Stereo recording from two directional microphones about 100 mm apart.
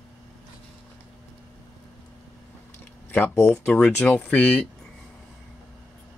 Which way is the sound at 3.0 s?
25° left (ahead or behind).